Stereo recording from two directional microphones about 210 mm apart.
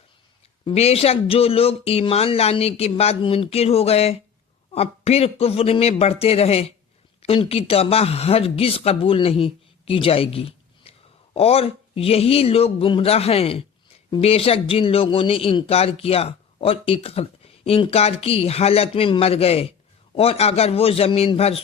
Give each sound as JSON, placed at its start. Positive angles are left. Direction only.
{"t": 0.6, "sound": "a man's voice", "side_deg": 30}